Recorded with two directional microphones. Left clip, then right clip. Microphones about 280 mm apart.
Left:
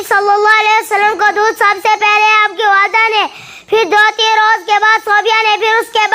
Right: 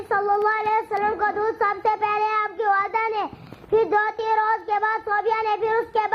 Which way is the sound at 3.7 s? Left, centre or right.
Left.